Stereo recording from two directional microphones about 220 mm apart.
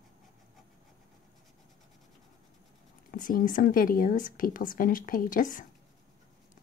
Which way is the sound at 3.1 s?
40° left (ahead or behind).